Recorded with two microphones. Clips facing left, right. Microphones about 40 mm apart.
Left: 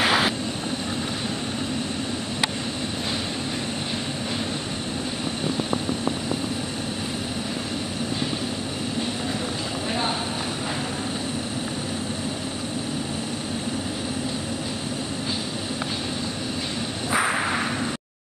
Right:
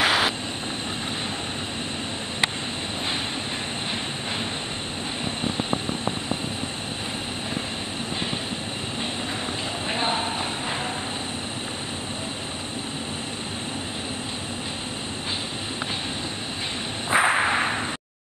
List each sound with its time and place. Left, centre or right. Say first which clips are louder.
0.0 s vehicle: even; centre
17.1 s whip: right 3 dB; right